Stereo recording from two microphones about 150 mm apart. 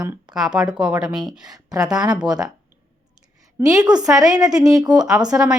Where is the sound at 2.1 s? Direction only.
5° right (ahead or behind).